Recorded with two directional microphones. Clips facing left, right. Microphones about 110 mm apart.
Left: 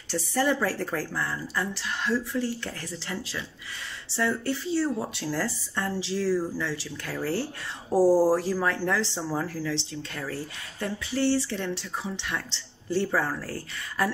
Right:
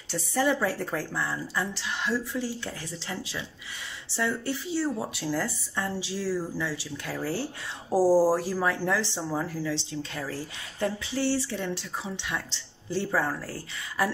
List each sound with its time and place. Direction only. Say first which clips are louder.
0.1 s speech: even; 15° right (ahead or behind)